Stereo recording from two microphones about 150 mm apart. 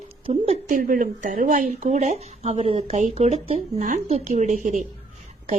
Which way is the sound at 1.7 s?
50° right (ahead or behind).